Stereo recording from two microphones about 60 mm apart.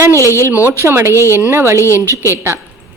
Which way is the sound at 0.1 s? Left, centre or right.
Left.